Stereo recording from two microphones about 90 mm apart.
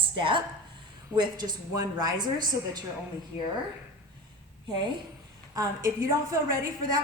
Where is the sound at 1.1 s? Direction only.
50° right (ahead or behind).